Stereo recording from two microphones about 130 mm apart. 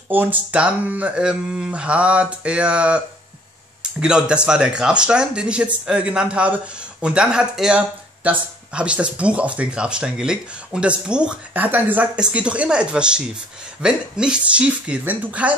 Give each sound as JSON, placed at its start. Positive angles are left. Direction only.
{"t": 0.1, "sound": "speech", "side_deg": -15}
{"t": 4.0, "sound": "speech", "side_deg": -5}